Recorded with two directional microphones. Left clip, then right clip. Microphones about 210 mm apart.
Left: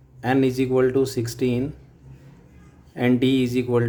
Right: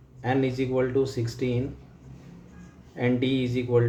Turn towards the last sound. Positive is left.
turn(degrees=50)  # may be behind; listen again after turning